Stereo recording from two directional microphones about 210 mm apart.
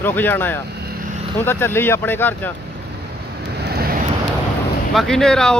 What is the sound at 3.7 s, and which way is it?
Vehicle, 45° right (ahead or behind).